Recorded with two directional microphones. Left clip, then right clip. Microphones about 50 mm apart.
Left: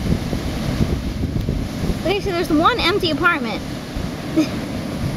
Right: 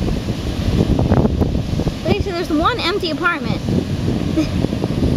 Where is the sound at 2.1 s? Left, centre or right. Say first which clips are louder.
Left 1 dB; centre.